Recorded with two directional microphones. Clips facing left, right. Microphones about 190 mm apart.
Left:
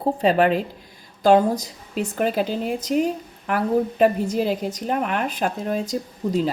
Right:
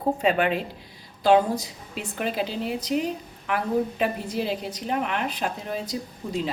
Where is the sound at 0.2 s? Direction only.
35° left (ahead or behind).